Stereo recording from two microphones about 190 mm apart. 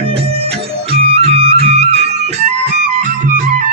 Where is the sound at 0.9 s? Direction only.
30° right (ahead or behind).